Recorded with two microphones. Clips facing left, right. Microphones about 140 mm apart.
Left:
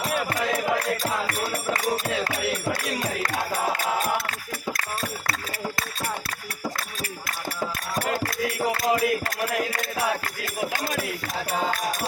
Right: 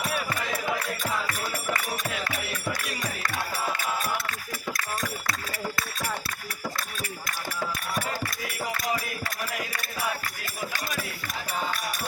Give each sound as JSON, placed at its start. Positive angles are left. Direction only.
{"t": 0.0, "sound": "music", "side_deg": 30}
{"t": 1.7, "sound": "music", "side_deg": 30}
{"t": 8.6, "sound": "music", "side_deg": 25}
{"t": 9.0, "sound": "a sound", "side_deg": 60}